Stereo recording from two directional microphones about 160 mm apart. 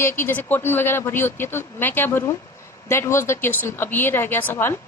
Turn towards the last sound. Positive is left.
turn(degrees=15)  # may be behind; listen again after turning